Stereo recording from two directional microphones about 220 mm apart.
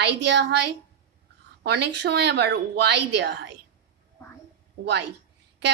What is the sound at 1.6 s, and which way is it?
A woman's voice, 50° right (ahead or behind).